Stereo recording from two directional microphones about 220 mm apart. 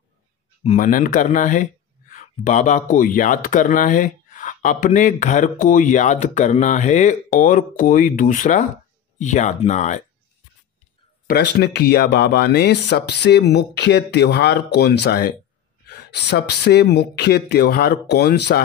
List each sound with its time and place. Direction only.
0.7 s speech: 40° left (ahead or behind)
11.2 s speech: 45° left (ahead or behind)